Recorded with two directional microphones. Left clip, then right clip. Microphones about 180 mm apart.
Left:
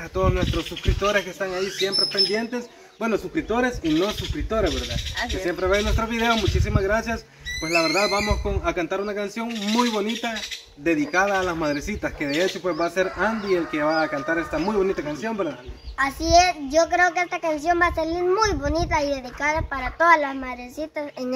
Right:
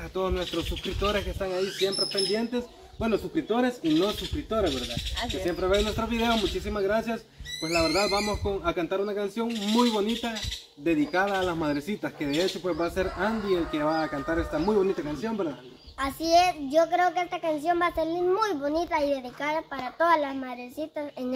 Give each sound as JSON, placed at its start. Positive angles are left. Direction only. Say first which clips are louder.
{"t": 0.1, "sound": "speech", "louder": "left 5 dB", "side_deg": 20}
{"t": 16.3, "sound": "a child's voice", "louder": "left 4 dB", "side_deg": -10}